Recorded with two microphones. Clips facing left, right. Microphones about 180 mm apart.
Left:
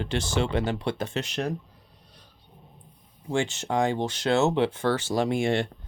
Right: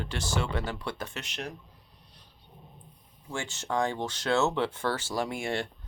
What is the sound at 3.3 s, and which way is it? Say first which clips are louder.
Speech: left 6 dB; 20° left (ahead or behind).